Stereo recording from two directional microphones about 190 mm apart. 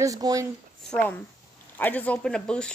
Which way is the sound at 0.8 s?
5° left (ahead or behind).